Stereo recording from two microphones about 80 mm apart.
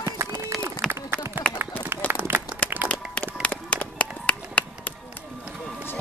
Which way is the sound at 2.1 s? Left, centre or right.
Right.